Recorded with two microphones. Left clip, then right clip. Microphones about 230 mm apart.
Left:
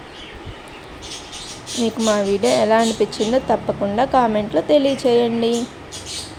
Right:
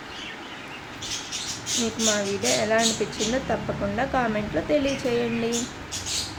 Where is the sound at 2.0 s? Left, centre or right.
Left.